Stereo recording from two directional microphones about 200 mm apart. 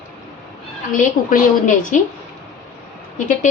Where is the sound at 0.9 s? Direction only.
40° left (ahead or behind).